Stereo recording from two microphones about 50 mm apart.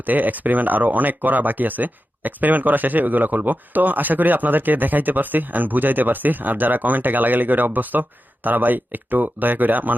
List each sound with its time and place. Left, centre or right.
0.0 s speech: right